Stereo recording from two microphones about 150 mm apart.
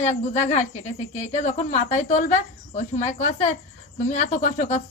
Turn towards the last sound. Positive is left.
turn(degrees=50)  # may be behind; listen again after turning